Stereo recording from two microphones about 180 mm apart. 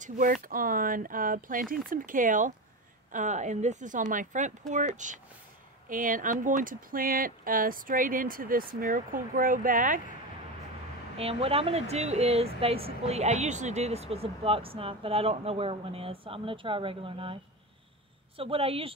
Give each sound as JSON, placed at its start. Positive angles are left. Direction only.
{"t": 0.0, "sound": "speech", "side_deg": -50}
{"t": 11.1, "sound": "speech", "side_deg": -35}
{"t": 18.4, "sound": "speech", "side_deg": -30}